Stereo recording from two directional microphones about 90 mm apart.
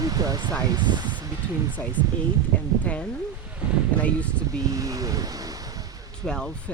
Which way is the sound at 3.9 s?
15° left (ahead or behind).